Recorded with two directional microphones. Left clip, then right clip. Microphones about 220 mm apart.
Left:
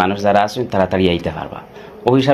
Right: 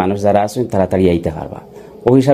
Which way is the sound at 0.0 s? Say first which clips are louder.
Even; 55° right (ahead or behind).